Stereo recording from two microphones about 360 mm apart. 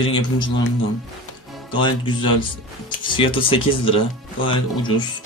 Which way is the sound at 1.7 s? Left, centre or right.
Centre.